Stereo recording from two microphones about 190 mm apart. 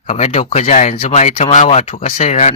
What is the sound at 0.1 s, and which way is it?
A man's voice, 35° left (ahead or behind).